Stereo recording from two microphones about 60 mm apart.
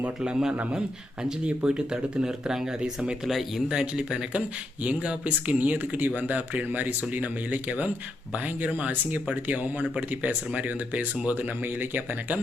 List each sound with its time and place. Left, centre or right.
0.0 s speech: centre
3.2 s speech: centre
3.7 s speech: centre; by 12.4 s right